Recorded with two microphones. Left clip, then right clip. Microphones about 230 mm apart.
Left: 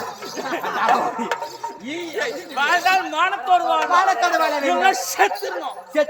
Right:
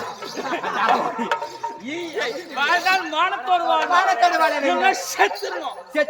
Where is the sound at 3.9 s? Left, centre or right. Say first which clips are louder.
Even; centre.